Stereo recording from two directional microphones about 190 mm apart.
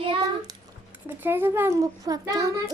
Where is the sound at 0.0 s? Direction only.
30° right (ahead or behind).